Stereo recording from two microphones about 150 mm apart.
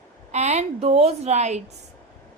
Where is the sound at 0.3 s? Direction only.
50° right (ahead or behind).